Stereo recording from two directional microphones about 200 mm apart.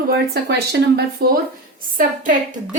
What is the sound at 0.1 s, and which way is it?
Speech, 55° right (ahead or behind).